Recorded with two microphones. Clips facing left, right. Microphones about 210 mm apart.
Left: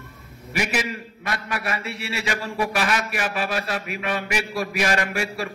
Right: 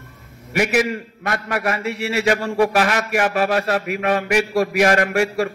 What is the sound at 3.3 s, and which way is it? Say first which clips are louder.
Speech: right 7 dB; 70° right (ahead or behind).